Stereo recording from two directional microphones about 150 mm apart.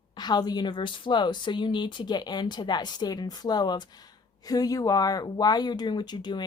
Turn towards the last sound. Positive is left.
turn(degrees=30)  # may be behind; listen again after turning